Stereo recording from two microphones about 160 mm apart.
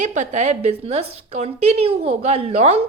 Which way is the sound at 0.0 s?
50° right (ahead or behind).